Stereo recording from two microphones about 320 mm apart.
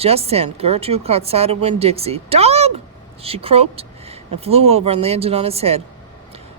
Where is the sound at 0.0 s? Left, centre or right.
Centre.